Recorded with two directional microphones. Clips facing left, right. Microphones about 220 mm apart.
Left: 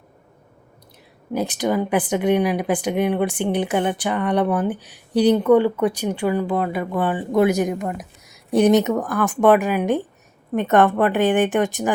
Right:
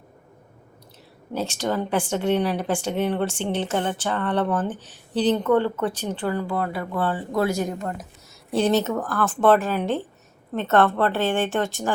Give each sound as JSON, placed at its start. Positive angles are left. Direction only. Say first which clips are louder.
{"t": 1.3, "sound": "speech", "louder": "left 4 dB", "side_deg": 15}